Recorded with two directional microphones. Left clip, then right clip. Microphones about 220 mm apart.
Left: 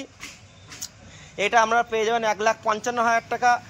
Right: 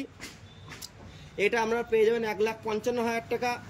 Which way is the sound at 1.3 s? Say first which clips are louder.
Left 7 dB; centre (ahead or behind).